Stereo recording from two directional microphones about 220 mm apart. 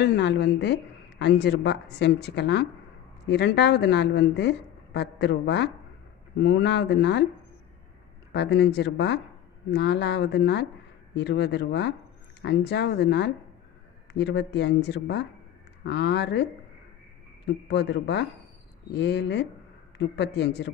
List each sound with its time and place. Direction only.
0.0 s a woman's voice: 50° left (ahead or behind)
8.3 s a woman's voice: 50° left (ahead or behind)
17.6 s a woman's voice: 50° left (ahead or behind)